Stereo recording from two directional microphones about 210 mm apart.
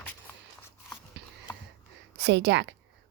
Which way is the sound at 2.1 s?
55° right (ahead or behind).